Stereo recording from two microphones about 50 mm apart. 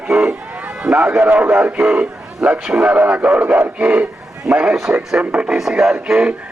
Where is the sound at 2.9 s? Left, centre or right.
Right.